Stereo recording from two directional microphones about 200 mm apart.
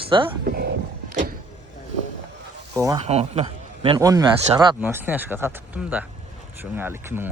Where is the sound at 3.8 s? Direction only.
20° right (ahead or behind).